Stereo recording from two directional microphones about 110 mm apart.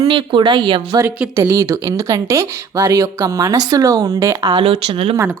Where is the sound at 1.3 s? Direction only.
25° right (ahead or behind).